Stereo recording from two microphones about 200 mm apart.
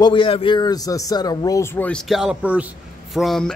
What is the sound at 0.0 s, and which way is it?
A man's voice, 25° left (ahead or behind).